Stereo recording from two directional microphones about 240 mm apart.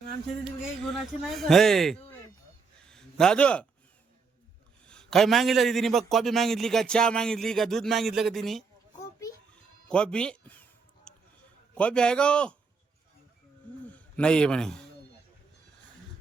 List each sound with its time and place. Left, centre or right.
0.8 s a man's voice: centre
4.9 s a man's voice: centre
9.9 s a sound: centre
11.7 s a man's voice: centre
13.9 s a man's voice: centre